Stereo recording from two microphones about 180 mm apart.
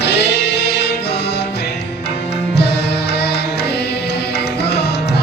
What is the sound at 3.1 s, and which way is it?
Music, 65° left (ahead or behind).